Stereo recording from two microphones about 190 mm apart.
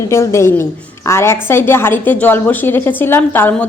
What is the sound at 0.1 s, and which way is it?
A woman's voice, 15° left (ahead or behind).